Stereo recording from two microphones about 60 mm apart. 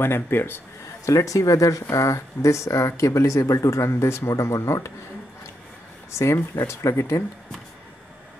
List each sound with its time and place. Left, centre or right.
0.0 s a man's voice: left
1.0 s speech: left
6.1 s speech: left